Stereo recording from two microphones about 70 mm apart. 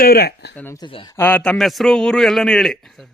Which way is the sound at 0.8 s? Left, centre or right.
Left.